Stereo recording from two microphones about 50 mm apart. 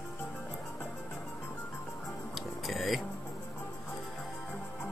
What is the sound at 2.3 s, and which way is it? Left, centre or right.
Music, centre.